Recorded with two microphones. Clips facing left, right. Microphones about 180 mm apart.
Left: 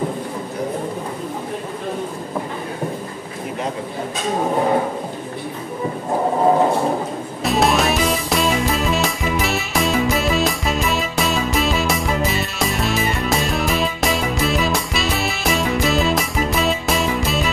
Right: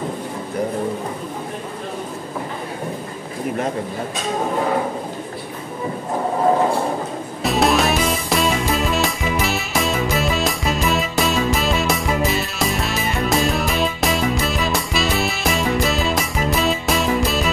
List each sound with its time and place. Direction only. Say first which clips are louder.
7.4 s music: even; centre (ahead or behind)